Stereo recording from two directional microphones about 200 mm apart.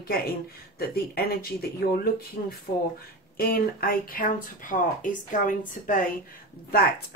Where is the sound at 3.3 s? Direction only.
50° left (ahead or behind).